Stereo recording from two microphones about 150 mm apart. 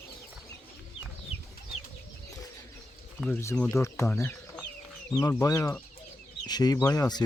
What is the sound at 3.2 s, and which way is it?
Speech, 15° left (ahead or behind).